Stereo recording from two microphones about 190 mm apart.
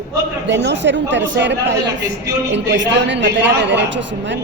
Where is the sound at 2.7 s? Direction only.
70° right (ahead or behind).